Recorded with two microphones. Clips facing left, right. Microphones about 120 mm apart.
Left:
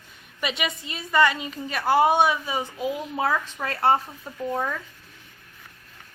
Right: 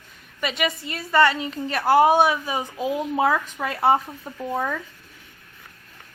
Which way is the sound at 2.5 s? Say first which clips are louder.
Right 2 dB; 20° right (ahead or behind).